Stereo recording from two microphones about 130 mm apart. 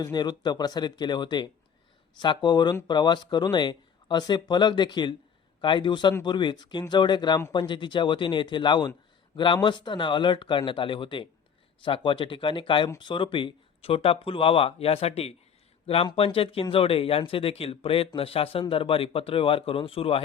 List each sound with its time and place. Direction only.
0.0 s speech: 35° left (ahead or behind)